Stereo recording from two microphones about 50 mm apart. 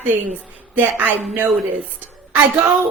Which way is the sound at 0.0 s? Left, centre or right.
Right.